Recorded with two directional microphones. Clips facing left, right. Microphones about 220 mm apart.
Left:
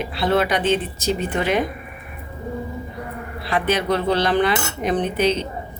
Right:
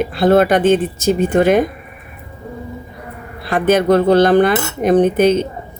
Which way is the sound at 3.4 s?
50° right (ahead or behind).